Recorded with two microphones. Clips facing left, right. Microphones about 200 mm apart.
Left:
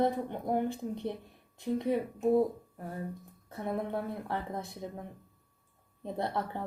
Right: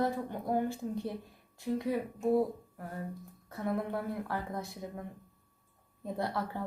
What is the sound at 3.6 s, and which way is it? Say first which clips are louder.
Speech: even; 25° left (ahead or behind).